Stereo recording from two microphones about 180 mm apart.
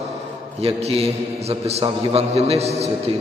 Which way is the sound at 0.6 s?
35° right (ahead or behind).